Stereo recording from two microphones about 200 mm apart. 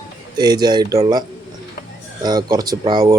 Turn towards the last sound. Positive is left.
turn(degrees=-20)  # may be behind; listen again after turning